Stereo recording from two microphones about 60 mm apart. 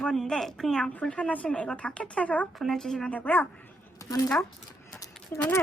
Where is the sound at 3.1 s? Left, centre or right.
Left.